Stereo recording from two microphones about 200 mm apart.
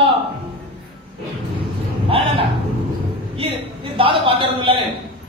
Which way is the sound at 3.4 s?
25° right (ahead or behind).